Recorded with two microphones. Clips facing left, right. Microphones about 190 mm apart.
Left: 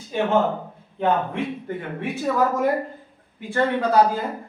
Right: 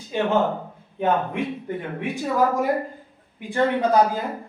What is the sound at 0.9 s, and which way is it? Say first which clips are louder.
Speech: even; 15° right (ahead or behind).